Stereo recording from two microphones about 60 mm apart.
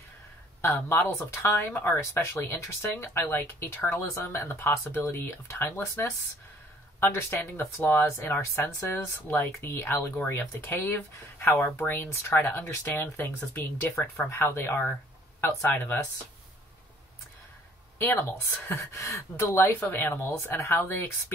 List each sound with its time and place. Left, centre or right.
0.6 s speech: left
14.4 s speech: left
17.9 s speech: left
18.7 s speech: left
20.3 s speech: left